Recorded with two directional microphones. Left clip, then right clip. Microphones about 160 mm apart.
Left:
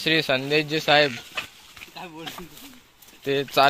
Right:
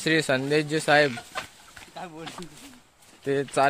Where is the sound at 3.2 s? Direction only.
5° right (ahead or behind).